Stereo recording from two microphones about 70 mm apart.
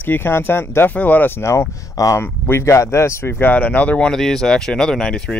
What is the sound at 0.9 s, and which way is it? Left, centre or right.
Speech, left.